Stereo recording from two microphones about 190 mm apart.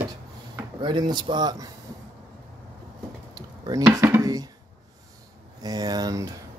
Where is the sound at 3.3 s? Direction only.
20° right (ahead or behind).